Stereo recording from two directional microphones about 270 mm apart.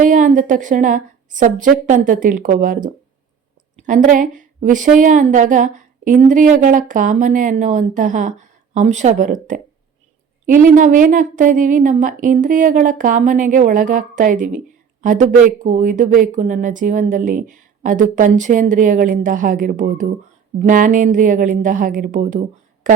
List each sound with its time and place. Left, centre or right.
0.0 s a woman's voice: right